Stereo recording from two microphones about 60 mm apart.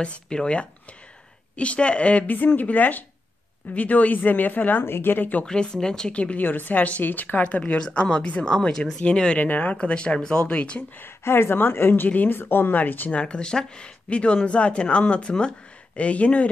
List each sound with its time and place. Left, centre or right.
0.0 s speech: centre; by 5.4 s left
5.4 s speech: centre
6.4 s speech: left
11.0 s a woman's voice: left
13.2 s speech: centre